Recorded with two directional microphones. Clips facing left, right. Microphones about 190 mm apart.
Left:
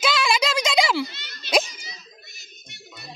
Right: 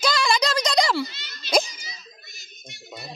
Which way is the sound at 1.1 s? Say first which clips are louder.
Left 1 dB; 60° left (ahead or behind).